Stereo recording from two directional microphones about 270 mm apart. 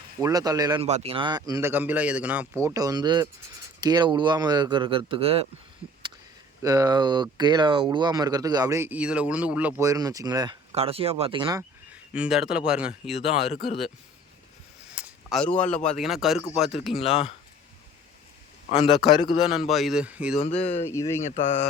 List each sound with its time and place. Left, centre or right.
0.2 s speech: centre
6.6 s speech: centre
12.1 s a man's voice: centre
13.1 s speech: left
14.9 s a sound: centre
15.7 s a man's voice: centre
17.0 s speech: left
18.7 s a man's voice: centre
19.4 s a man's voice: centre
20.4 s speech: left
20.8 s a man's voice: centre
21.2 s speech: left